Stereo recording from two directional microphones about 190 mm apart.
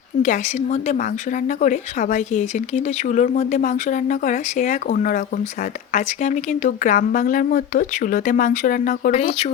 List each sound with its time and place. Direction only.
0.2 s a woman's voice: 40° left (ahead or behind)